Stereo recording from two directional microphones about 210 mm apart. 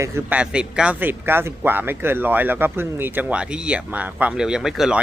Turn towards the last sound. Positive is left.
turn(degrees=0)  # may be behind; listen again after turning